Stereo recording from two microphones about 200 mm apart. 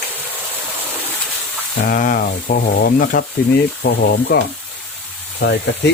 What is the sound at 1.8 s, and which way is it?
Speech, 40° left (ahead or behind).